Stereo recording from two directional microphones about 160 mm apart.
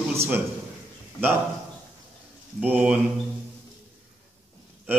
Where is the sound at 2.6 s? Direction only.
10° right (ahead or behind).